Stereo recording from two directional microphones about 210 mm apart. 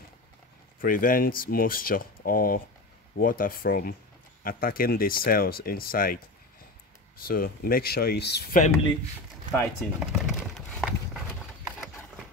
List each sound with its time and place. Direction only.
0.7 s speech: 40° left (ahead or behind)
7.2 s speech: 45° left (ahead or behind)
9.5 s a sound: centre (ahead or behind)